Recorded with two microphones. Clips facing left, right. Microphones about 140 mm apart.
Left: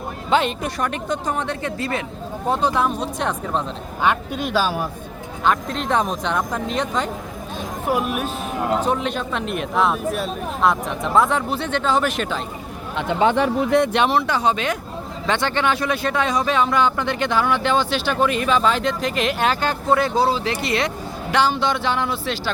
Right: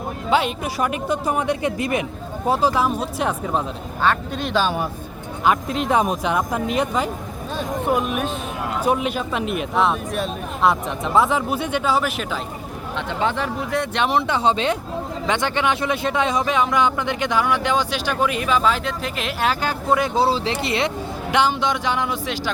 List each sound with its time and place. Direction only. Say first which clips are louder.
0.3 s speech: left 1 dB; 10° right (ahead or behind)
2.5 s speech: right 1 dB; 5° right (ahead or behind)
4.0 s speech: even; 10° left (ahead or behind); by 7.1 s 5° right (ahead or behind)
7.9 s speech: even; 5° left (ahead or behind)
8.8 s speech: right 1 dB; 10° right (ahead or behind)
13.0 s speech: left 5 dB; 15° left (ahead or behind)
14.1 s speech: even; 20° right (ahead or behind)
15.3 s speech: left 1 dB; 15° right (ahead or behind)
20.2 s speech: even; 30° right (ahead or behind)